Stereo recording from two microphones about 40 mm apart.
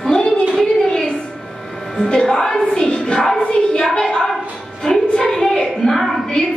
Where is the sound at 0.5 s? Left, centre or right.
Centre.